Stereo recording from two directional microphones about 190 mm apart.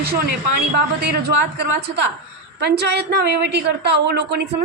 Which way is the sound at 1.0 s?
55° right (ahead or behind).